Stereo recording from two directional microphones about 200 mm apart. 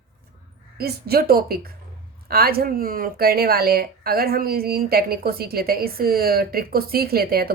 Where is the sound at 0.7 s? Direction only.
50° right (ahead or behind).